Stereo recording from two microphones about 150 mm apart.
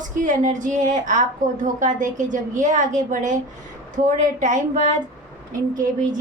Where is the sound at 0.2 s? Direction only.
55° right (ahead or behind).